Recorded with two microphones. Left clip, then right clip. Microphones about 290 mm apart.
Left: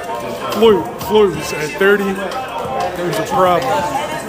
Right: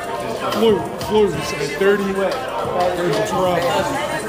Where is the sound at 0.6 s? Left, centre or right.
Centre.